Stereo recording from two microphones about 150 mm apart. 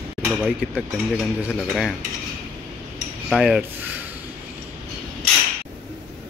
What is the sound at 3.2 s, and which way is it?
Speech, 5° right (ahead or behind).